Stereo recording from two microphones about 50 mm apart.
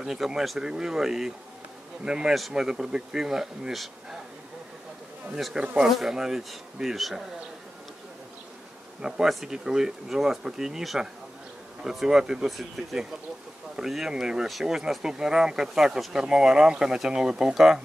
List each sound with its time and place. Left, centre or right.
0.0 s speech: centre
5.5 s speech: centre
9.0 s speech: centre